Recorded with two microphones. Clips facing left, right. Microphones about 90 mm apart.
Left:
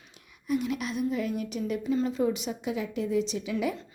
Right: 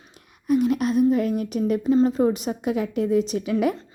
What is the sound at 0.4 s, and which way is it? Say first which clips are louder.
A woman's voice: right 9 dB; 45° right (ahead or behind).